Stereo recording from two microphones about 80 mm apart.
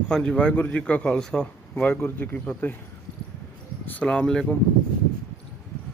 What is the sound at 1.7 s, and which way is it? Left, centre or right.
A man's voice, left.